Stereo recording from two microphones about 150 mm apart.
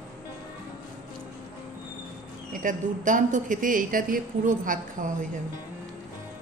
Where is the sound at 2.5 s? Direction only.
60° right (ahead or behind).